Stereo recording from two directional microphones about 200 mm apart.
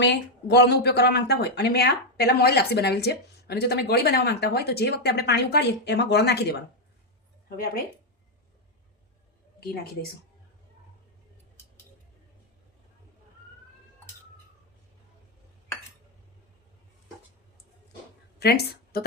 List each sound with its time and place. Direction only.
0.0 s speech: 60° left (ahead or behind)
18.3 s a woman's voice: 50° left (ahead or behind)